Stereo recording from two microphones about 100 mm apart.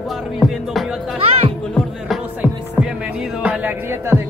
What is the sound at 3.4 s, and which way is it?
Music, 15° right (ahead or behind).